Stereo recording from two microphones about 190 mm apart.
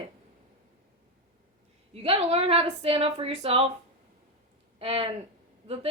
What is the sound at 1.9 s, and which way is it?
Speech, 30° right (ahead or behind).